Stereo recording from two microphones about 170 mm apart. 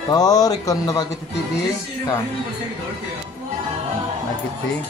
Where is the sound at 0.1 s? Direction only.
20° left (ahead or behind).